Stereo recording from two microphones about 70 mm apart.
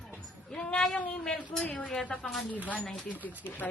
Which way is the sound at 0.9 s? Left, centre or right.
Left.